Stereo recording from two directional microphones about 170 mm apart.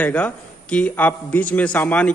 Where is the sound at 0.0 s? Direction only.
10° left (ahead or behind).